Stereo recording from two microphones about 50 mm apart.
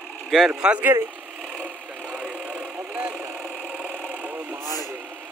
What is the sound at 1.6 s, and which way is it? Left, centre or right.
Vehicle, right.